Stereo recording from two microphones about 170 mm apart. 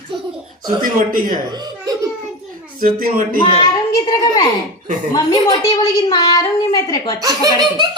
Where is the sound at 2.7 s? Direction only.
55° right (ahead or behind).